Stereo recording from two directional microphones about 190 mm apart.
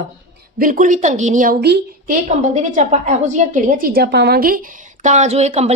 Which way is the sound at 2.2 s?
40° right (ahead or behind).